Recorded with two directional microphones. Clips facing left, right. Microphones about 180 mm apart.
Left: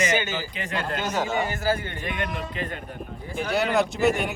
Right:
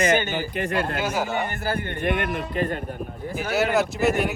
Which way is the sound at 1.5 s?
60° right (ahead or behind).